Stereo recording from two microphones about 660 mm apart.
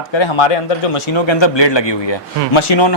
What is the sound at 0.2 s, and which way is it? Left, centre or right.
A man's voice, left.